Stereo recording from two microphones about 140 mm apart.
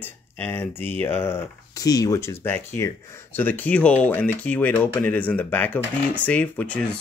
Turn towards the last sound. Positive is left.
turn(degrees=10)  # may be behind; listen again after turning